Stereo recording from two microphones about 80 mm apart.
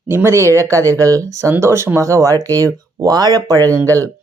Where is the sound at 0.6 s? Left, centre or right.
Right.